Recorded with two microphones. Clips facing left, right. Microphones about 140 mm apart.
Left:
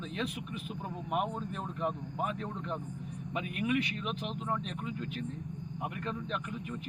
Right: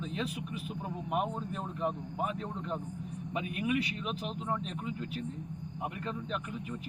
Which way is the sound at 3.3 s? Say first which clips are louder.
Even; 25° right (ahead or behind).